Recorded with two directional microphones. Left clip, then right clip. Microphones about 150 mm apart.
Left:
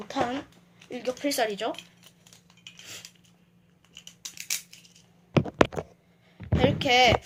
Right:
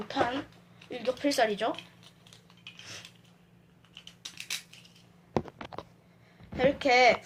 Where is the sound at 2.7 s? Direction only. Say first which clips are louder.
Left 2 dB; 45° left (ahead or behind).